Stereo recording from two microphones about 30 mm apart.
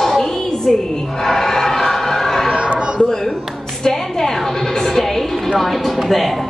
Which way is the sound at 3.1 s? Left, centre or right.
Centre.